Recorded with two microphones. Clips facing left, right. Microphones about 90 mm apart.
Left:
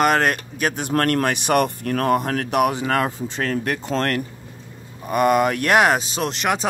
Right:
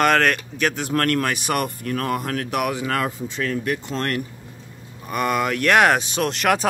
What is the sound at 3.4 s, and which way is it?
Speech, 50° left (ahead or behind).